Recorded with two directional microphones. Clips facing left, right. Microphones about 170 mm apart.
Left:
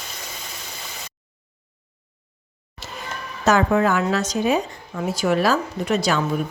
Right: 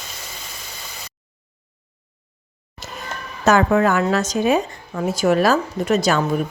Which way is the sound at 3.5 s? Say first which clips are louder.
Right 2 dB; 55° right (ahead or behind).